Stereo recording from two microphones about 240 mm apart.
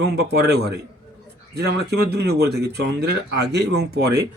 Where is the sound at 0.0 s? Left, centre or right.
Right.